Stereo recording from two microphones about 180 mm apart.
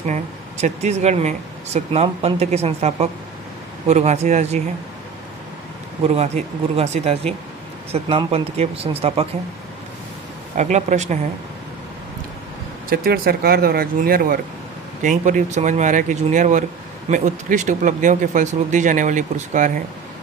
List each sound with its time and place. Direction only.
0.0 s speech: 40° right (ahead or behind)
6.1 s speech: 35° right (ahead or behind)
10.5 s speech: 40° right (ahead or behind)
12.9 s speech: 55° right (ahead or behind)